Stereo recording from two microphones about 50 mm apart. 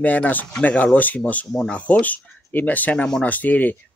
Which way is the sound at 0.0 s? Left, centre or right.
Left.